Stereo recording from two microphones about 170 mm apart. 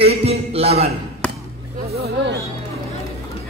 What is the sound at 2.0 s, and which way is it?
Speech, 90° right.